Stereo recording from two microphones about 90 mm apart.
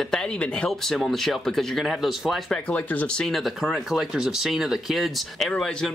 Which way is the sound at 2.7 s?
15° left (ahead or behind).